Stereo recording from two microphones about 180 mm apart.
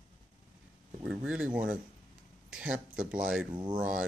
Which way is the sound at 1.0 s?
5° right (ahead or behind).